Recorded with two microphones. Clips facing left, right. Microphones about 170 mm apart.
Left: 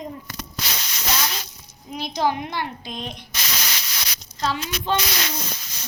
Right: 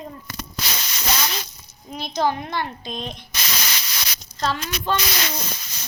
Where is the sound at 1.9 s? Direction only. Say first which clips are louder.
Even; 15° left (ahead or behind).